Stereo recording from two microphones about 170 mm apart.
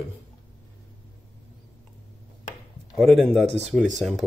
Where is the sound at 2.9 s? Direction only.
Centre (ahead or behind).